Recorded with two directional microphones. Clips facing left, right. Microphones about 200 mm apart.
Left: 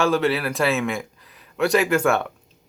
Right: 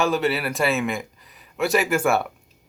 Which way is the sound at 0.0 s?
Centre (ahead or behind).